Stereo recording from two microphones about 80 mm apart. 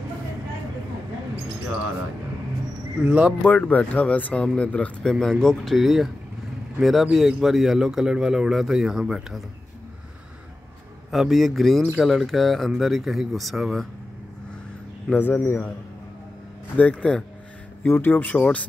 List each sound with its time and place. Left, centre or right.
3.4 s a man's voice: centre
11.1 s a man's voice: centre
15.1 s speech: left
16.7 s speech: centre